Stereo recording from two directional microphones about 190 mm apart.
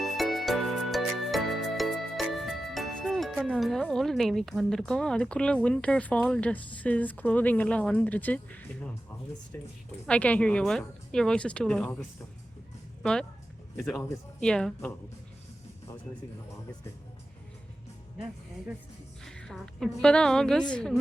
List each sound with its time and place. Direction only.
0.0 s music: centre (ahead or behind)
10.1 s a woman's voice: 5° left (ahead or behind)
13.0 s a woman's voice: 5° left (ahead or behind)
19.2 s a woman's voice: 5° left (ahead or behind)